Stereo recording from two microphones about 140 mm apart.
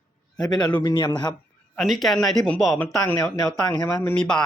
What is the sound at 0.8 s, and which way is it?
Speech, 35° left (ahead or behind).